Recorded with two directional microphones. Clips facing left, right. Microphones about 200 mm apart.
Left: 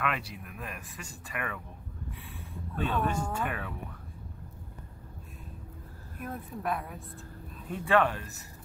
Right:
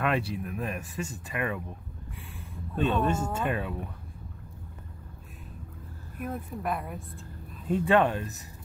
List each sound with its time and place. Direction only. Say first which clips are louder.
0.0 s speech: right 6 dB; 30° right (ahead or behind)
2.7 s speech: right 4 dB; 25° right (ahead or behind)
6.2 s speech: right 2 dB; centre (ahead or behind)
7.7 s speech: right 3 dB; 25° right (ahead or behind)